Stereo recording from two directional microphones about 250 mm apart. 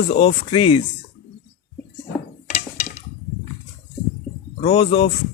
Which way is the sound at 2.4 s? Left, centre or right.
Left.